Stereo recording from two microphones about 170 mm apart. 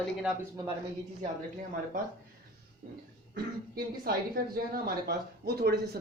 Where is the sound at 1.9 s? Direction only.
55° right (ahead or behind).